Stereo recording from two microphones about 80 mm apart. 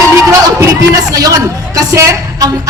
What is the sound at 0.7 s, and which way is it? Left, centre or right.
A woman's voice, right.